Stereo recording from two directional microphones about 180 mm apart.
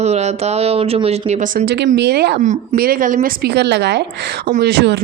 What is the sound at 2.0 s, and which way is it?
Speech, 65° right (ahead or behind).